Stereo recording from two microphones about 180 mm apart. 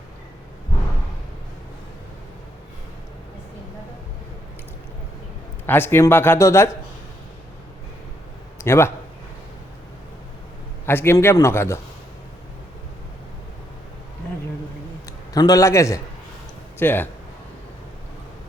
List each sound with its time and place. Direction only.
5.6 s speech: 10° left (ahead or behind)
8.6 s speech: 15° left (ahead or behind)
10.8 s speech: 15° left (ahead or behind)
15.0 s a man's voice: 20° left (ahead or behind)